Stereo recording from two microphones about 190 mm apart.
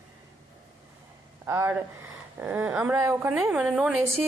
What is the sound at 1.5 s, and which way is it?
Speech, 15° right (ahead or behind).